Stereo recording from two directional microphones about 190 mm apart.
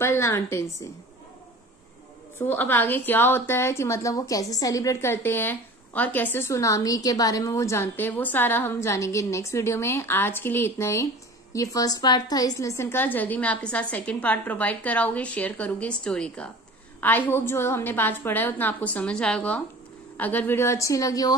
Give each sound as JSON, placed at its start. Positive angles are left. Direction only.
{"t": 0.0, "sound": "a woman's voice", "side_deg": 15}
{"t": 2.3, "sound": "a woman's voice", "side_deg": 10}